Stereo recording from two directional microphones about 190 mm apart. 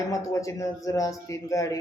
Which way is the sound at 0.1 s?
15° left (ahead or behind).